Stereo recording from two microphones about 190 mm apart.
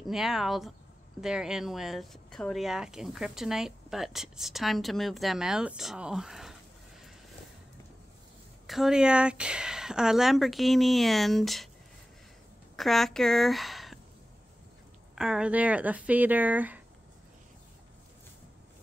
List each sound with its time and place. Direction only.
0.0 s speech: centre (ahead or behind)
8.6 s speech: centre (ahead or behind)
12.7 s speech: centre (ahead or behind)
15.1 s speech: 5° right (ahead or behind)